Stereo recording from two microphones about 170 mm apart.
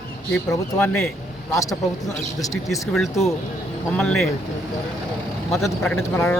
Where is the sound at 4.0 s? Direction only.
5° left (ahead or behind).